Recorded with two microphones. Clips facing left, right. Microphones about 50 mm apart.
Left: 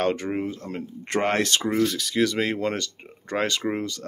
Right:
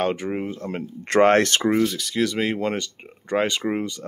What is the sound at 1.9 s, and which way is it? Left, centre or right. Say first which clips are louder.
Speech: even; centre.